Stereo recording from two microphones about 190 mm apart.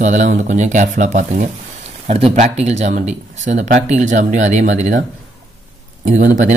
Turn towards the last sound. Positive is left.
turn(degrees=-40)  # may be behind; listen again after turning